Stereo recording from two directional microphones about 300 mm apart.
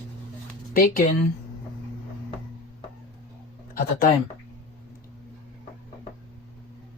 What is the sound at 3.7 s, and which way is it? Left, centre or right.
Speech, left.